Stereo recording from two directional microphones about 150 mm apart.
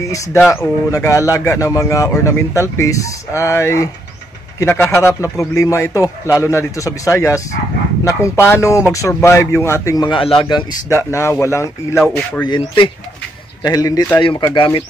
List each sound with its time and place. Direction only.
0.5 s speech: 20° left (ahead or behind)
12.4 s speech: 30° left (ahead or behind)